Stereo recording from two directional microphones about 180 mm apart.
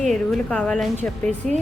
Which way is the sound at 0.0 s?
Centre (ahead or behind).